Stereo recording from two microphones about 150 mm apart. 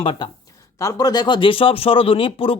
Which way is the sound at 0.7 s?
20° left (ahead or behind).